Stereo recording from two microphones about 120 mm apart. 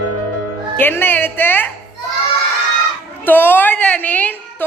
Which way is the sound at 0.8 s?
15° left (ahead or behind).